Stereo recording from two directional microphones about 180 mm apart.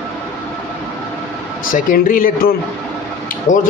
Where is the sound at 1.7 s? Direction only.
50° left (ahead or behind).